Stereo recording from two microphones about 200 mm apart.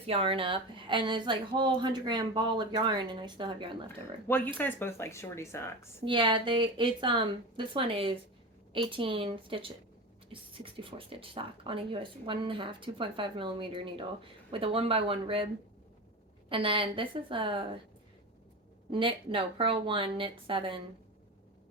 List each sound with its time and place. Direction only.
0.0 s speech: 30° right (ahead or behind)
4.3 s speech: 10° left (ahead or behind)
6.1 s speech: 25° right (ahead or behind)
16.5 s speech: 25° right (ahead or behind)
18.9 s speech: 25° right (ahead or behind)